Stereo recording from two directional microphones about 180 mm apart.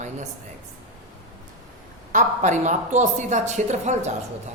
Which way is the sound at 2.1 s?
45° right (ahead or behind).